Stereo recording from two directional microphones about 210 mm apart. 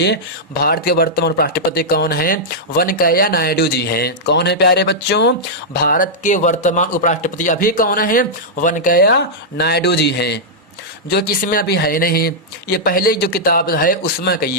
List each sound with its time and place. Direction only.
0.6 s speech: 45° left (ahead or behind)
5.7 s speech: 45° left (ahead or behind)